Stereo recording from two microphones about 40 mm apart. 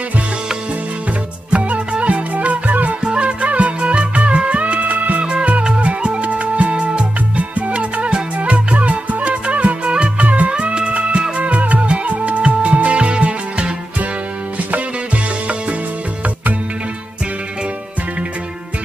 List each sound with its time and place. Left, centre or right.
1.5 s music: right
3.0 s music: right
5.2 s music: right
10.5 s music: right